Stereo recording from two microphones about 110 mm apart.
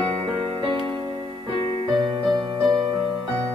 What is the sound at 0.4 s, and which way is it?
Music, 50° right (ahead or behind).